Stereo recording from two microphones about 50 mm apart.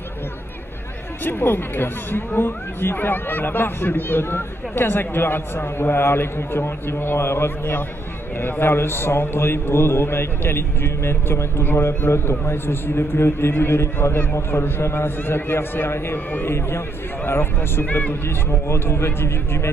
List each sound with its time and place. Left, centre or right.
1.2 s speech: left
11.6 s speech: left
12.1 s speech: left
18.5 s a man's voice: left